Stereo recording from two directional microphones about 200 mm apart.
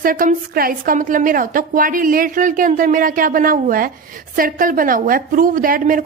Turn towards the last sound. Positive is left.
turn(degrees=-45)  # may be behind; listen again after turning